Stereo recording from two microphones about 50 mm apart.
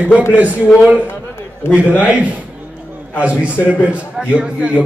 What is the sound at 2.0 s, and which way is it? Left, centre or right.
A man's voice, right.